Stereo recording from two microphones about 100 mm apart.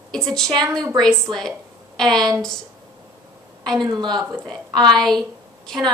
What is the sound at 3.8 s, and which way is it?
Speech, 40° right (ahead or behind).